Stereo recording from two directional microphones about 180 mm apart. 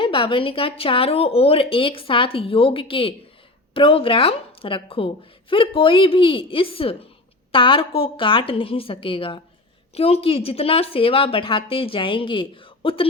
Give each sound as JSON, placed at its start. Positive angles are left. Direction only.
{"t": 0.0, "sound": "a woman's voice", "side_deg": 30}